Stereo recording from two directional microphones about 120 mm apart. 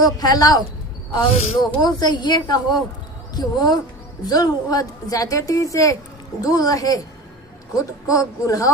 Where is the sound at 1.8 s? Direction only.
35° left (ahead or behind).